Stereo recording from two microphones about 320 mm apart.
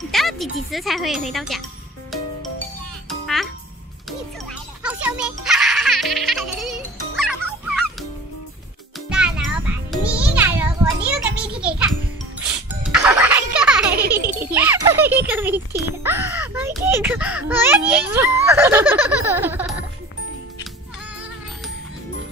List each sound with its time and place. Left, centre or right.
0.1 s speech: centre
3.1 s music: centre
4.5 s music: centre
9.1 s music: centre
13.9 s music: right
14.4 s a sound: centre
16.0 s a child's voice: centre